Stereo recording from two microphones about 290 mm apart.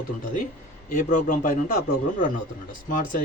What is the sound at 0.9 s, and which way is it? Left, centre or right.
Speech, left.